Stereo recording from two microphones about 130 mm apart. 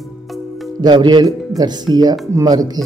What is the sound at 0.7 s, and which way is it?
Speech, 35° right (ahead or behind).